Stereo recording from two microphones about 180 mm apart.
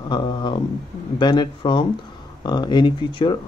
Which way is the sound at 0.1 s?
25° left (ahead or behind).